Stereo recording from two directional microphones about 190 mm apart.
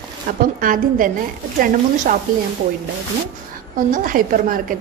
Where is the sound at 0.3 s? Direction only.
45° right (ahead or behind).